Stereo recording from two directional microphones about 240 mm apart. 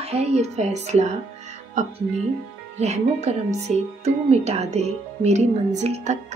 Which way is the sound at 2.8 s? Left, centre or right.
Right.